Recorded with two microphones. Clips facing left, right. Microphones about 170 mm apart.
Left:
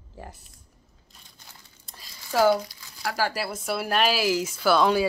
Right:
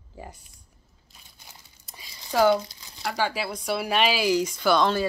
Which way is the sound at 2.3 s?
5° left (ahead or behind).